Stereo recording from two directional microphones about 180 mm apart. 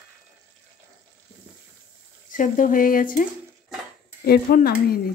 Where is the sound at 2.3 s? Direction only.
45° left (ahead or behind).